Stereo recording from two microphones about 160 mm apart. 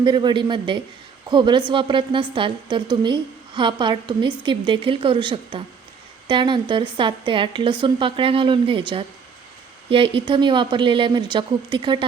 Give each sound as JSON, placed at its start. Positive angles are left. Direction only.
{"t": 0.0, "sound": "a woman's voice", "side_deg": -30}